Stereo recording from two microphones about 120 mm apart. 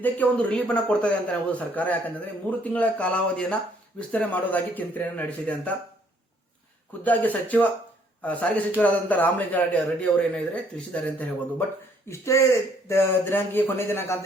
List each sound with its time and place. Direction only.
0.0 s a man's voice: 10° left (ahead or behind)
7.0 s a man's voice: 15° left (ahead or behind)
12.0 s speech: 25° left (ahead or behind)